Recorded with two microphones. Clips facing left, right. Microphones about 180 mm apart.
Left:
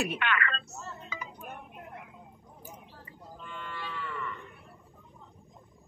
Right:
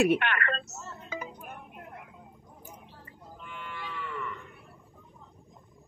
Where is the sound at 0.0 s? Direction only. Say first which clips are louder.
Right 6 dB; 55° right (ahead or behind).